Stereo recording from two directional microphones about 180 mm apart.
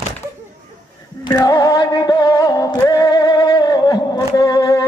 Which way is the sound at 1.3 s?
20° left (ahead or behind).